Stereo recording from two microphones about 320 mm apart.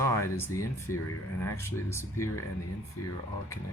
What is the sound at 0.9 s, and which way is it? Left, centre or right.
Speech, left.